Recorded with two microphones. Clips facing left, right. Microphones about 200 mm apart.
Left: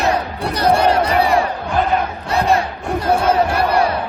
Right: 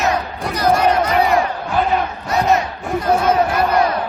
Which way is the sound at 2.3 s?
30° left (ahead or behind).